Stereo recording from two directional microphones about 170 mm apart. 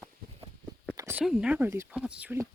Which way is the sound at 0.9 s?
15° right (ahead or behind).